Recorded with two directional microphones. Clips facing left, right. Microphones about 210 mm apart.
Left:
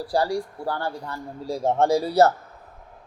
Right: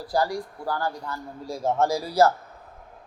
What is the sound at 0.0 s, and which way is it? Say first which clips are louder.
A man's voice: left 2 dB; 30° left (ahead or behind).